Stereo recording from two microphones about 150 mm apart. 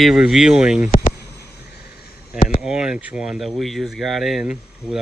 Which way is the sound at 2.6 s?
5° right (ahead or behind).